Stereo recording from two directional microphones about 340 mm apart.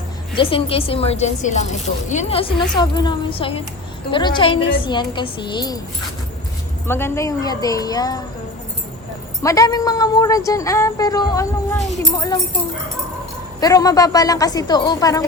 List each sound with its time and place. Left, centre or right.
0.3 s speech: centre
6.8 s speech: centre
9.4 s speech: centre
13.6 s speech: centre